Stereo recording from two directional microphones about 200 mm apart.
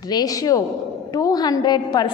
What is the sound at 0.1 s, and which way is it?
A man's voice, 20° left (ahead or behind).